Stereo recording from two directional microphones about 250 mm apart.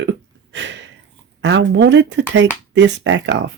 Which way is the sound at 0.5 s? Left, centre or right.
Right.